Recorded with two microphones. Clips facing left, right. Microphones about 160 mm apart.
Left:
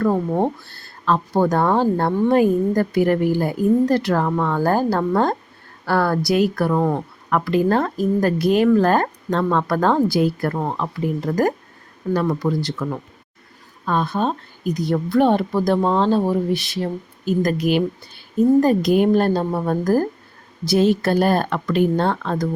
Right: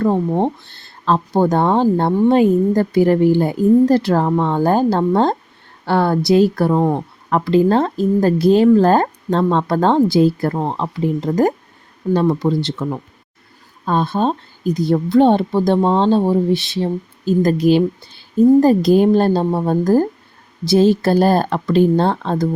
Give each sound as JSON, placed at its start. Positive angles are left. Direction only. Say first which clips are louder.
{"t": 0.3, "sound": "speech", "louder": "right 2 dB", "side_deg": -20}